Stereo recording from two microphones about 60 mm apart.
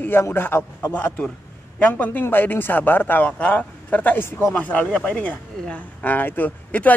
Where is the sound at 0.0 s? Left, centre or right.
Left.